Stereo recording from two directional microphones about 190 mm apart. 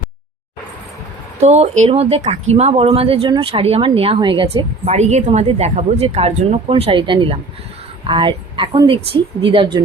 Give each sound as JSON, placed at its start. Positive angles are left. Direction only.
{"t": 1.4, "sound": "speech", "side_deg": -35}